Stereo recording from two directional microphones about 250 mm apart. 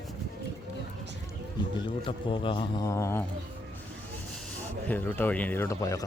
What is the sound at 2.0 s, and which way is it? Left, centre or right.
A man's voice, centre.